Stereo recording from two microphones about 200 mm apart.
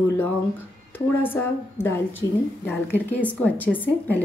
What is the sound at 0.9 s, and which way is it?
A woman's voice, 10° left (ahead or behind).